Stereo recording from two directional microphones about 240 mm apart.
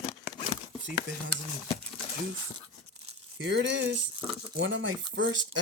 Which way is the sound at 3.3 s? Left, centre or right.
Right.